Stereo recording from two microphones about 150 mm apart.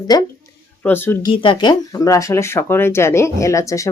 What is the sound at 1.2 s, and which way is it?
Speech, 35° left (ahead or behind).